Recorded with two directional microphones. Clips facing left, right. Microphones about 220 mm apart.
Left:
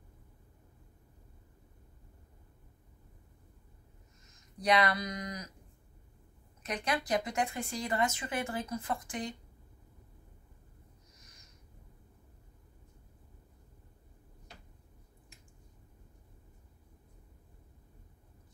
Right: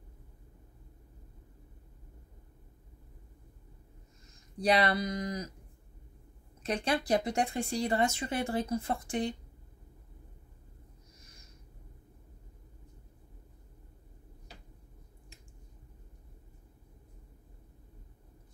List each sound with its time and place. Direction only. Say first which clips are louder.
4.6 s speech: right 2 dB; 30° right (ahead or behind)
6.6 s speech: right 4 dB; 30° right (ahead or behind)